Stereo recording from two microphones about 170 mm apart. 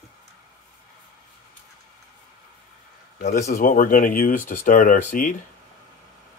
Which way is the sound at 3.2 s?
50° left (ahead or behind).